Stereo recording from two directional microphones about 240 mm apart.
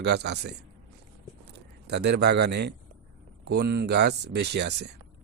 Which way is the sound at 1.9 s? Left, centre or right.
Right.